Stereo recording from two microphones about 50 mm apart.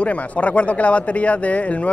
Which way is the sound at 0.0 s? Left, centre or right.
Left.